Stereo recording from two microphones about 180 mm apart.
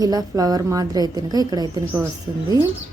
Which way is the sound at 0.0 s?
20° right (ahead or behind).